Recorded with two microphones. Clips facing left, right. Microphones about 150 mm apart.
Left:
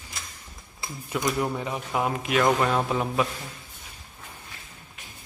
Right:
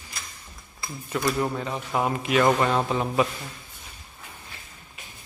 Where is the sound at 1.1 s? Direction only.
15° left (ahead or behind).